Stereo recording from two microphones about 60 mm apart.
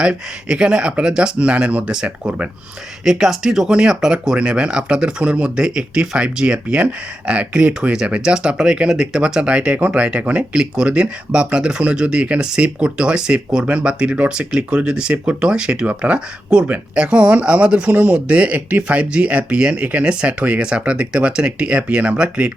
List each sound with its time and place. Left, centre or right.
0.0 s speech: centre
3.0 s speech: centre; by 10.4 s right
10.5 s speech: centre